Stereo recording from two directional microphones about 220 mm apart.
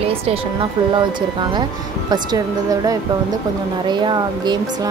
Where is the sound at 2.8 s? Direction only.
15° right (ahead or behind).